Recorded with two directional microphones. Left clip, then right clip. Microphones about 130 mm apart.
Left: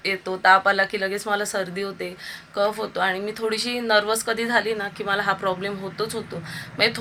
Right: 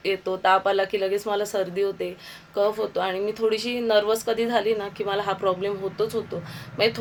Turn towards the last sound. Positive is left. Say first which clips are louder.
# left 1 dB
turn(degrees=-20)  # may be behind; listen again after turning